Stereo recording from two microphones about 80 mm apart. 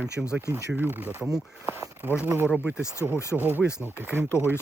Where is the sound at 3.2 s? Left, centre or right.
Left.